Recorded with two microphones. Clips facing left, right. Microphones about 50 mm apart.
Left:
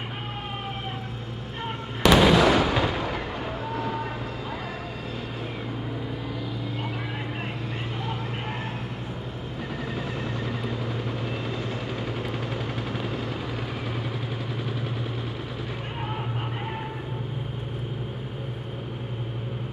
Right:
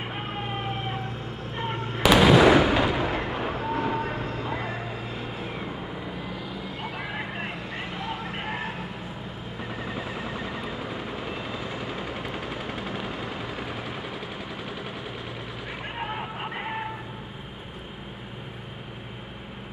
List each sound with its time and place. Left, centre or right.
1.7 s fireworks: centre
2.5 s artillery fire: centre
4.5 s vehicle: right
9.8 s vehicle: centre